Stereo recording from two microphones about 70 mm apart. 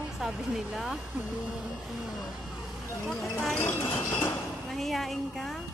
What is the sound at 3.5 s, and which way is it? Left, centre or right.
Speech, left.